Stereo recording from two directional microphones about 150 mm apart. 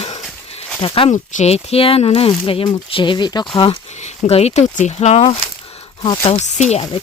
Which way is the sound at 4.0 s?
50° left (ahead or behind).